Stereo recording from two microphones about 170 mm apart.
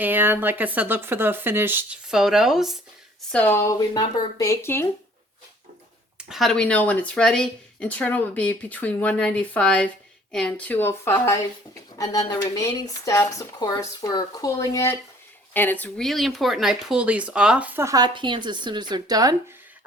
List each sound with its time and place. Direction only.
0.0 s speech: 10° right (ahead or behind)
3.2 s speech: 10° left (ahead or behind)
6.1 s speech: 5° right (ahead or behind); by 19.4 s 20° right (ahead or behind)